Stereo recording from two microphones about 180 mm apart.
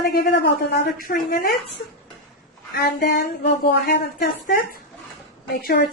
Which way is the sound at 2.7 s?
60° left (ahead or behind).